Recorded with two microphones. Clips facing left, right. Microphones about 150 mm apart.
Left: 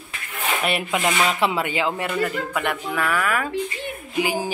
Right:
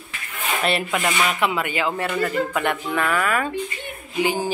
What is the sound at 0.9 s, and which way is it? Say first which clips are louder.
Speech: left 1 dB; 25° left (ahead or behind).